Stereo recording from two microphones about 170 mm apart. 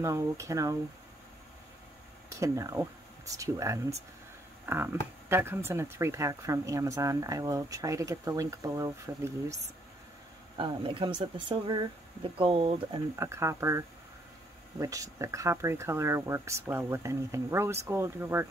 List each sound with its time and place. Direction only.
0.0 s speech: 20° right (ahead or behind)
2.4 s speech: 20° right (ahead or behind)
10.6 s speech: 30° right (ahead or behind)
13.1 s speech: 15° right (ahead or behind)